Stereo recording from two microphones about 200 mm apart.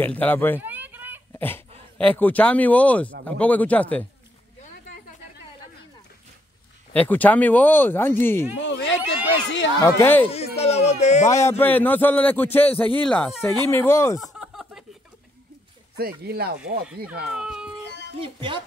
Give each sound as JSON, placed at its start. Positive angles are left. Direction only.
{"t": 0.0, "sound": "a man's voice", "side_deg": 10}
{"t": 0.6, "sound": "a sound", "side_deg": -10}
{"t": 1.3, "sound": "sneeze", "side_deg": 10}
{"t": 2.0, "sound": "a man's voice", "side_deg": 10}
{"t": 6.9, "sound": "a man's voice", "side_deg": 10}
{"t": 8.5, "sound": "a sound", "side_deg": 65}
{"t": 9.9, "sound": "a man's voice", "side_deg": 10}
{"t": 10.3, "sound": "speech", "side_deg": 30}
{"t": 11.2, "sound": "a man's voice", "side_deg": 15}
{"t": 14.2, "sound": "a sound", "side_deg": 0}
{"t": 16.0, "sound": "speech", "side_deg": -50}
{"t": 16.5, "sound": "speech", "side_deg": -5}
{"t": 18.2, "sound": "speech", "side_deg": -25}